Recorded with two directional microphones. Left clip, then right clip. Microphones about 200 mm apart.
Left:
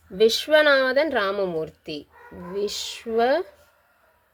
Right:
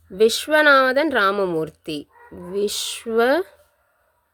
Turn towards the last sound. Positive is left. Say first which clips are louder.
# right 3 dB
turn(degrees=-30)  # may be behind; listen again after turning